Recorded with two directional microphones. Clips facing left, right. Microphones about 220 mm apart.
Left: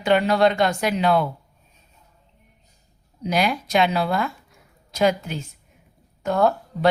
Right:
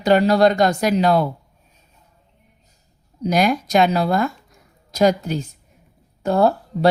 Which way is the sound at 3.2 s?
45° right (ahead or behind).